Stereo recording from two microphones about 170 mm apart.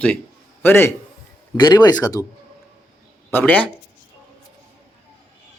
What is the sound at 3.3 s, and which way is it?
Speech, 10° left (ahead or behind).